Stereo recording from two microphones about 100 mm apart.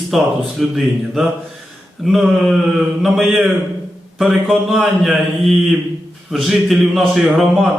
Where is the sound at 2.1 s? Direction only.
Centre (ahead or behind).